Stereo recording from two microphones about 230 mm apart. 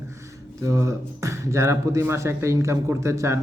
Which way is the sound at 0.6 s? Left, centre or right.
Centre.